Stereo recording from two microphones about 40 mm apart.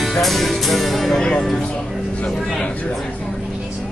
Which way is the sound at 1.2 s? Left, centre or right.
Left.